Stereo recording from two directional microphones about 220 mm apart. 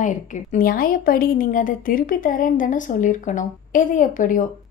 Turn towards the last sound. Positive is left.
turn(degrees=35)  # may be behind; listen again after turning